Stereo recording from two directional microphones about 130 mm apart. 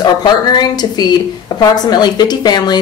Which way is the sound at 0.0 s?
30° left (ahead or behind).